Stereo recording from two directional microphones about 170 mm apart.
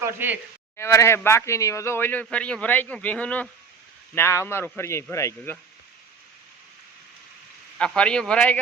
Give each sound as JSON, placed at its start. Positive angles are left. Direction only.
{"t": 0.0, "sound": "speech", "side_deg": -10}
{"t": 0.8, "sound": "speech", "side_deg": 15}
{"t": 7.8, "sound": "a man's voice", "side_deg": 5}